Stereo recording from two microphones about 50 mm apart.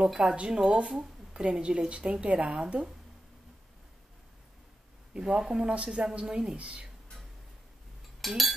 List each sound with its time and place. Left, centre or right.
0.1 s a woman's voice: centre
5.1 s a woman's voice: centre
8.2 s speech: centre